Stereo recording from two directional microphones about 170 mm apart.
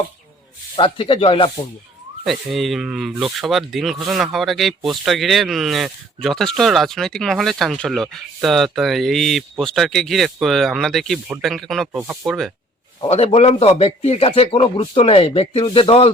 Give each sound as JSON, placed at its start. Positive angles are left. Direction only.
{"t": 0.8, "sound": "a man's voice", "side_deg": 30}
{"t": 2.2, "sound": "speech", "side_deg": 0}
{"t": 13.0, "sound": "a man's voice", "side_deg": 35}